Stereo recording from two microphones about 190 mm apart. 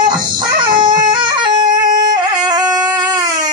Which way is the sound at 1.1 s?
25° right (ahead or behind).